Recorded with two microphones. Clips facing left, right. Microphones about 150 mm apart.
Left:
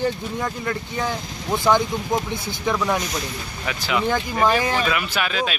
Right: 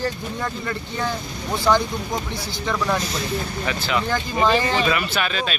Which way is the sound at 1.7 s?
15° left (ahead or behind).